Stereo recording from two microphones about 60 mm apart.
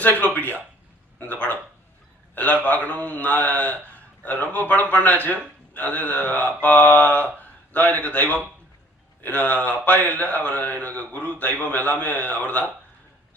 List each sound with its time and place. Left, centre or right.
0.0 s speech: left
1.2 s a sound: left
2.3 s speech: left